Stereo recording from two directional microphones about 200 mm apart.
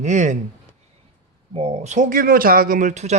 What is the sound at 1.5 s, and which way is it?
Speech, 30° right (ahead or behind).